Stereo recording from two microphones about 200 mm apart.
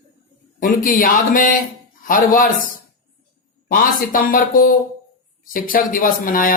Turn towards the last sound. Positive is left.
turn(degrees=45)  # may be behind; listen again after turning